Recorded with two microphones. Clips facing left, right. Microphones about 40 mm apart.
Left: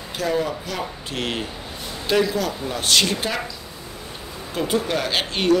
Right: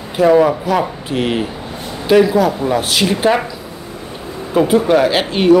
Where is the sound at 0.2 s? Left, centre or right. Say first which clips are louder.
Right 13 dB; right.